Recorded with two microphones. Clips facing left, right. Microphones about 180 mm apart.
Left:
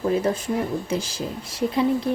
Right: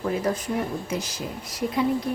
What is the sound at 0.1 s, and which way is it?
A woman's voice, 25° left (ahead or behind).